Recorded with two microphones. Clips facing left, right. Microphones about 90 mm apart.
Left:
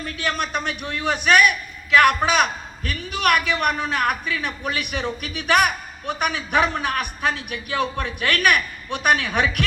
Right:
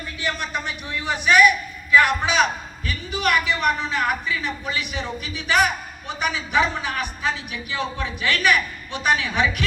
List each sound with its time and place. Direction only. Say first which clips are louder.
0.0 s a man's voice: left 2 dB; 60° left (ahead or behind)